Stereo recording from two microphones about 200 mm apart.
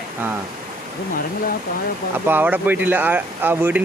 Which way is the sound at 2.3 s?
10° right (ahead or behind).